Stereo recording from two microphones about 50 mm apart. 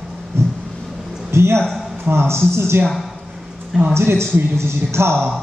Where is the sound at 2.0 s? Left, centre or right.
Right.